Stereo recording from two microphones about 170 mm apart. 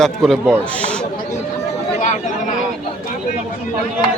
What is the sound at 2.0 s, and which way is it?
Chatter, 50° left (ahead or behind).